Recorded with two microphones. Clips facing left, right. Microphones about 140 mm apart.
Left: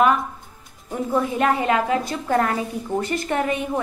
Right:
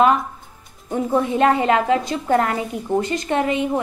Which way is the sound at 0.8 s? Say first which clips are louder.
Right 3 dB; 25° right (ahead or behind).